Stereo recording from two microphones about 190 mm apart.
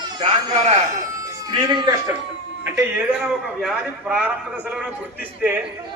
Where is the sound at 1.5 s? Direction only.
25° right (ahead or behind).